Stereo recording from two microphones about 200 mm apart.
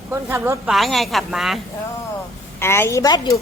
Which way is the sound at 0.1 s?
10° right (ahead or behind).